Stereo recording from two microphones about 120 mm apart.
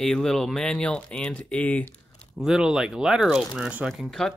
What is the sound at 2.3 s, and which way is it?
Speech, 5° right (ahead or behind).